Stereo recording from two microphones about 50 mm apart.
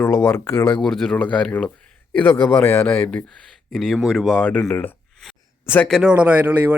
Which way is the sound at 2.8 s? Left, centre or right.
Left.